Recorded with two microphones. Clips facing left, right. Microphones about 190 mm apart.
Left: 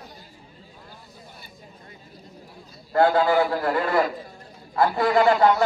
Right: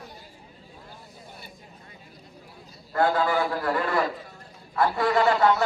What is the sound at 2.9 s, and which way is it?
A man's voice, 30° left (ahead or behind).